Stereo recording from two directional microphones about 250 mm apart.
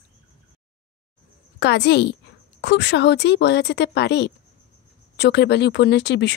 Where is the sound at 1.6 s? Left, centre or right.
Left.